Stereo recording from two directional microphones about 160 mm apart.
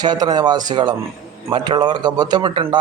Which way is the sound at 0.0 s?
25° right (ahead or behind).